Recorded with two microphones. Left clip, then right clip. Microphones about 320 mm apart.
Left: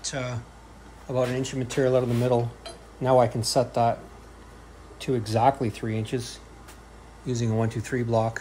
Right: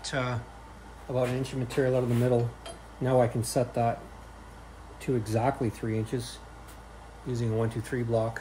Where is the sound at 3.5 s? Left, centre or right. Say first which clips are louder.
Left 5 dB; centre.